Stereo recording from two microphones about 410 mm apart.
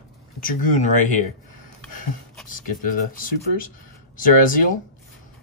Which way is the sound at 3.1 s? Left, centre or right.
Centre.